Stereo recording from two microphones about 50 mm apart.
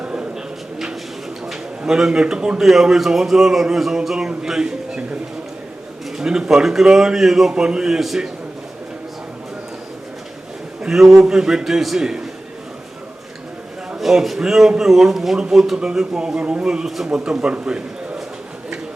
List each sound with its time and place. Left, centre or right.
0.0 s a sound: right
0.3 s a sound: centre
1.8 s speech: centre
2.6 s speech: centre
6.1 s speech: centre
10.8 s speech: centre
14.0 s a man's voice: centre
16.4 s a man's voice: right
16.6 s a man's voice: centre